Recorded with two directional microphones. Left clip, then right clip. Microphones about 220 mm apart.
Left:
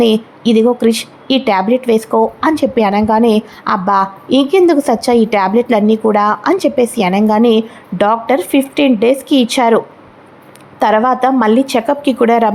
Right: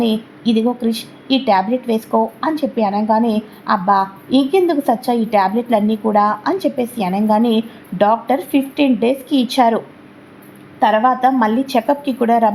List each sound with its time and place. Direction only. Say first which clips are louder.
0.0 s a woman's voice: left 7 dB; 20° left (ahead or behind)
10.8 s a woman's voice: left 2 dB; 25° left (ahead or behind)